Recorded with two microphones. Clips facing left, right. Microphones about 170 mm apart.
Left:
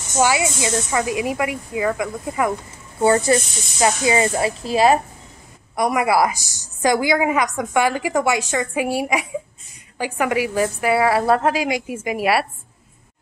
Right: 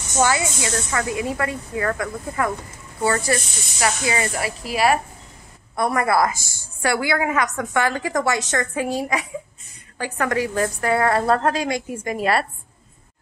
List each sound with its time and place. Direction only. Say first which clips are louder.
0.2 s a woman's voice: left 2 dB; 15° left (ahead or behind)
5.8 s a woman's voice: left 2 dB; 10° left (ahead or behind)